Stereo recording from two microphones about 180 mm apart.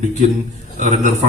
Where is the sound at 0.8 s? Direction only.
40° right (ahead or behind).